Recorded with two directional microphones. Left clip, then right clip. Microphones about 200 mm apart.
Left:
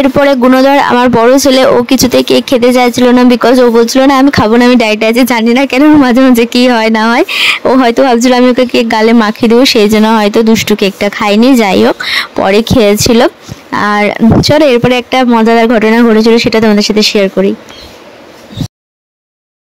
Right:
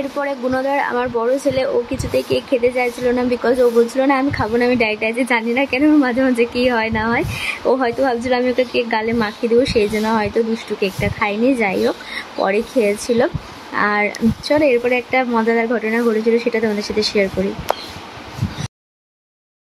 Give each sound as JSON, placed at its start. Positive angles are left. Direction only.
{"t": 0.2, "sound": "speech", "side_deg": 55}